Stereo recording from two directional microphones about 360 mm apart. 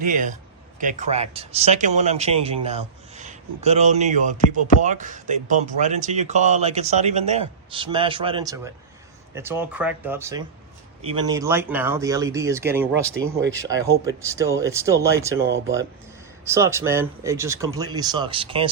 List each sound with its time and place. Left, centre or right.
0.0 s speech: right
15.4 s speech: right
16.6 s speech: centre